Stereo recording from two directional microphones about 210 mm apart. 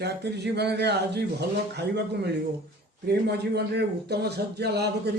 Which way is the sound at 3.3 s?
50° right (ahead or behind).